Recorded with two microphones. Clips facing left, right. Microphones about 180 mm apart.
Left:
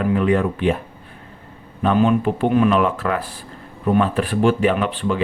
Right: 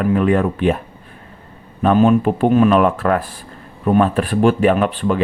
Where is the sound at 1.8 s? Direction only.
45° right (ahead or behind).